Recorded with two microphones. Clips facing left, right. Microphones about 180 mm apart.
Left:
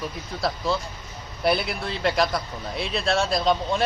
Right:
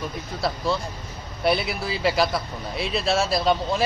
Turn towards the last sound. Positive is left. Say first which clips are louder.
# right 1 dB
turn(degrees=-5)  # may be behind; listen again after turning